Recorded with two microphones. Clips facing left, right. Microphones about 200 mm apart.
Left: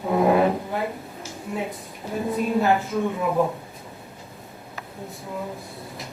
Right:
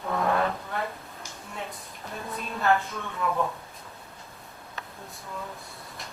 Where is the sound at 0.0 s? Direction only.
15° left (ahead or behind).